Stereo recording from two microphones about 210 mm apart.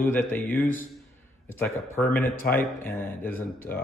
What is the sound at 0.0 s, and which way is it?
Speech, 10° left (ahead or behind).